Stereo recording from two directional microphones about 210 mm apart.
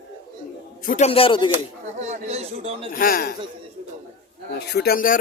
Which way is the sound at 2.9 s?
40° left (ahead or behind).